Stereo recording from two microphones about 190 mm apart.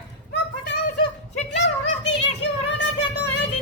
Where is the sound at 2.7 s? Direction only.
65° left (ahead or behind).